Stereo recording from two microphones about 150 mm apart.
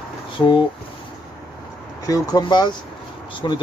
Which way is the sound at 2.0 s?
25° left (ahead or behind).